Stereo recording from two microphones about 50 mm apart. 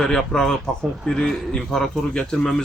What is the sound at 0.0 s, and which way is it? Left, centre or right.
Speech, centre.